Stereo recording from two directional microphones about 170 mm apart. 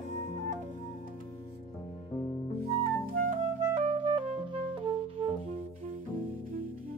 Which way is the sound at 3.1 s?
50° right (ahead or behind).